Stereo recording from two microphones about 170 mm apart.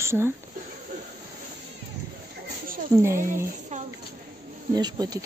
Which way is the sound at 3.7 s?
45° right (ahead or behind).